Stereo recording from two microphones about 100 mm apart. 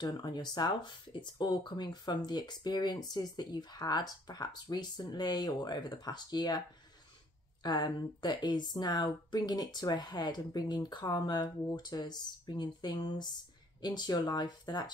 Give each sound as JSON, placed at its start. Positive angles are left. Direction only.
{"t": 0.0, "sound": "speech", "side_deg": 45}
{"t": 7.6, "sound": "speech", "side_deg": 45}